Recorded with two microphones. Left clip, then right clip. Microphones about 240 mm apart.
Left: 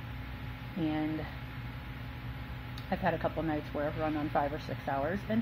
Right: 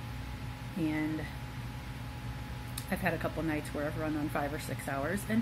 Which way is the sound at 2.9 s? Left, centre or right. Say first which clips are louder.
Left 2 dB; centre.